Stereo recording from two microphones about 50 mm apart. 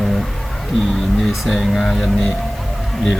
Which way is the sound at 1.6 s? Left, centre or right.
Centre.